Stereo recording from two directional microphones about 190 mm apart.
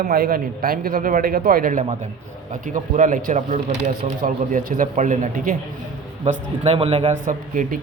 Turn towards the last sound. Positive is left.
turn(degrees=-45)  # may be behind; listen again after turning